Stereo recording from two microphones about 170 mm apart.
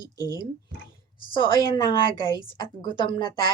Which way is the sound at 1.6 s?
25° left (ahead or behind).